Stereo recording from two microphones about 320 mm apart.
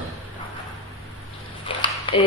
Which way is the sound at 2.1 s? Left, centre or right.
Centre.